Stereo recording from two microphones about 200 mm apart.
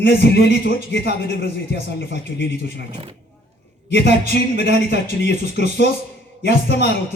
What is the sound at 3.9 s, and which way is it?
A man's voice, 55° left (ahead or behind).